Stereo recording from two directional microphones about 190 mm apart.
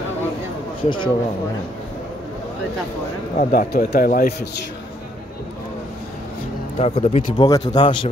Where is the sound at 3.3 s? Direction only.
50° left (ahead or behind).